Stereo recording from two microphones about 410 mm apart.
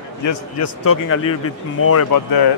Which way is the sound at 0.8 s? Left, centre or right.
Left.